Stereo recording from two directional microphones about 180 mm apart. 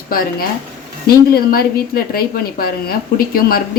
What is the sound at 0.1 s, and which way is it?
A woman's voice, 55° left (ahead or behind).